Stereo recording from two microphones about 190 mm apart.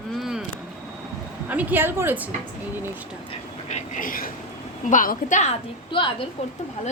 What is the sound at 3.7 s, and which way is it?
Vehicle, 45° left (ahead or behind).